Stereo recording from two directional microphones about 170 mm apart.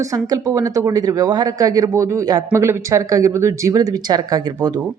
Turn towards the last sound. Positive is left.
turn(degrees=-25)  # may be behind; listen again after turning